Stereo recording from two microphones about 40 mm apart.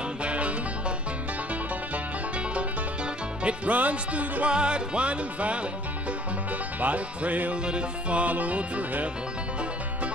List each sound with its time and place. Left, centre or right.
0.2 s music: right
3.4 s music: right
6.8 s music: right